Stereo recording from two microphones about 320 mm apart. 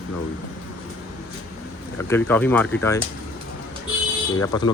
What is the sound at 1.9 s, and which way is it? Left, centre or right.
Speech, centre.